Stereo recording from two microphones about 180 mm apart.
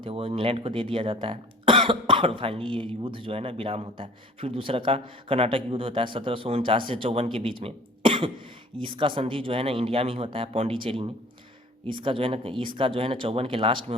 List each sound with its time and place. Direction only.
0.0 s speech: 30° right (ahead or behind)